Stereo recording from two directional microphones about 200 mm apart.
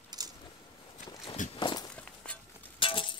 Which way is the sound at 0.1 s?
20° right (ahead or behind).